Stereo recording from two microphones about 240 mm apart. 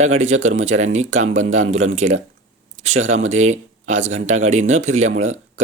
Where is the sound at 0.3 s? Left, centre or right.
Right.